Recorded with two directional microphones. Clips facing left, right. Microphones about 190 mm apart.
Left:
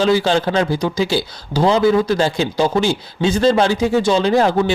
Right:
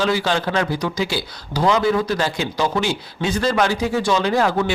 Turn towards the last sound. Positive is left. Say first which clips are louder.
# left 4 dB
turn(degrees=25)  # may be behind; listen again after turning